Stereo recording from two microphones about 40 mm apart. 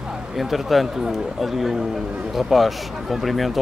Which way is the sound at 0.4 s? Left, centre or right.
Centre.